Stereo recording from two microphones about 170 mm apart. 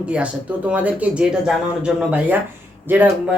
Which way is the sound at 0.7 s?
5° right (ahead or behind).